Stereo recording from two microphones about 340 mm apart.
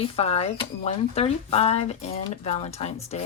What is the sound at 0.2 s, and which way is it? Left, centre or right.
A woman's voice, centre.